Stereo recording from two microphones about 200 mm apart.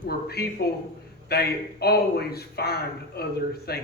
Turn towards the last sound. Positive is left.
turn(degrees=50)  # may be behind; listen again after turning